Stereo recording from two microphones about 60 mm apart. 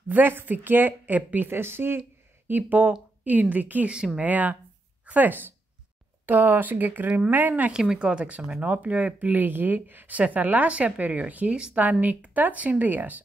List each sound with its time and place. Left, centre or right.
0.1 s speech: right
1.5 s speech: right
3.9 s speech: centre
4.2 s speech: right
7.7 s speech: centre; by 13.2 s right